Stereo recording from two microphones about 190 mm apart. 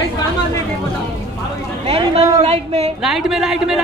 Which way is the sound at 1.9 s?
30° right (ahead or behind).